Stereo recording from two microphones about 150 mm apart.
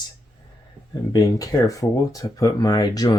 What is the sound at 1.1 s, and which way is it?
Speech, 25° left (ahead or behind).